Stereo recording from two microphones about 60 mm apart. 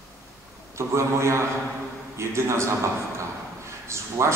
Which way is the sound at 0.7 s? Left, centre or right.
Right.